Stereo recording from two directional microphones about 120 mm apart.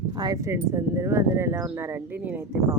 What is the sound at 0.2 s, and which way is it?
Speech, 30° right (ahead or behind).